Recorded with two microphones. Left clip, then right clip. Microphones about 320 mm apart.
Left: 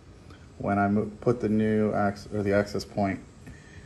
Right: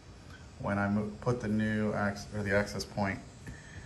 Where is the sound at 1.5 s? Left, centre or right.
Right.